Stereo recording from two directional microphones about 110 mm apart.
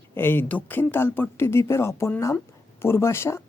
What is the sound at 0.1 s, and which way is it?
Speech, 20° left (ahead or behind).